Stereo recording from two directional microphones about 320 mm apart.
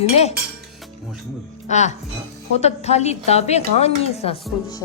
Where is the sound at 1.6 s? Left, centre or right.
Left.